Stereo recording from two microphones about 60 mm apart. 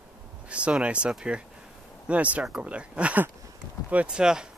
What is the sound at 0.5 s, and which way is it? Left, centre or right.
Speech, centre.